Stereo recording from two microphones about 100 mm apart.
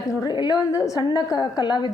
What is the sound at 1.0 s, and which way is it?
Speech, 45° left (ahead or behind).